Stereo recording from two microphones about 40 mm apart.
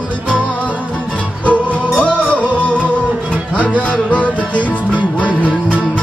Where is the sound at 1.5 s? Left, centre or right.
Left.